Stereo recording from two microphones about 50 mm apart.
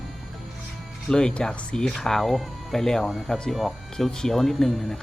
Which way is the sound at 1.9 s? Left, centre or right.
Centre.